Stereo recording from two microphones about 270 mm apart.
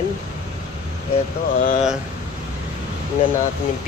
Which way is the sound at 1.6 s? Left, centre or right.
Left.